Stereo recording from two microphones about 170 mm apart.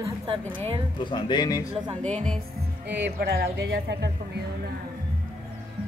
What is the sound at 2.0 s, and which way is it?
Speech, 5° left (ahead or behind).